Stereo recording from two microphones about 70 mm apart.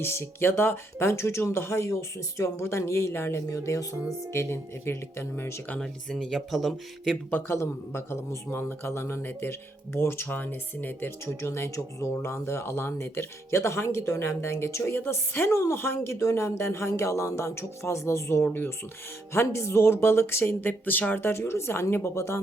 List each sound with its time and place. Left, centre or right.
0.0 s speech: left
5.8 s speech: centre
7.3 s speech: left
11.3 s speech: left